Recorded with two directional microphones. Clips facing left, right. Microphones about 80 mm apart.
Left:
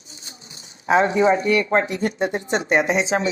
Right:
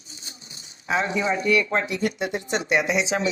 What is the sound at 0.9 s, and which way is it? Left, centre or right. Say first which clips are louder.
Speech: left 7 dB; left.